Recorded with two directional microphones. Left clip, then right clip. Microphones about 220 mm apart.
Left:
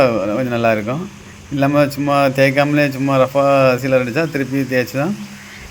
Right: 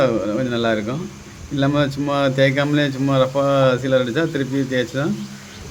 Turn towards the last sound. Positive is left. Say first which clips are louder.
# left 3 dB
turn(degrees=15)  # may be behind; listen again after turning